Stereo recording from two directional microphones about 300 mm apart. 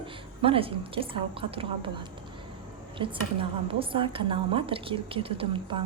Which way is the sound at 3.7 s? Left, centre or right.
Centre.